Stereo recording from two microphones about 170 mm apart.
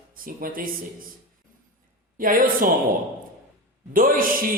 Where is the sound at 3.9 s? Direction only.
55° right (ahead or behind).